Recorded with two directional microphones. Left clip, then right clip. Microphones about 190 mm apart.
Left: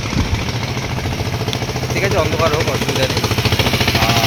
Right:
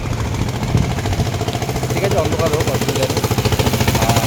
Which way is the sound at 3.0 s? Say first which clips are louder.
Left 1 dB; 75° right (ahead or behind).